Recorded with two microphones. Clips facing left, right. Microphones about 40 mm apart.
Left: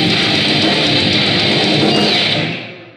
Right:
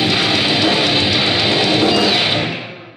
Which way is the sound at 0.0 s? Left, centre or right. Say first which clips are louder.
Left 1 dB; centre.